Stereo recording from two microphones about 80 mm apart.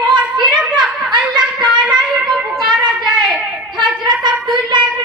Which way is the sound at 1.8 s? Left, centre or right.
Right.